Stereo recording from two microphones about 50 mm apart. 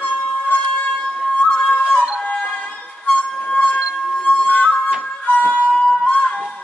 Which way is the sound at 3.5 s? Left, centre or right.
Left.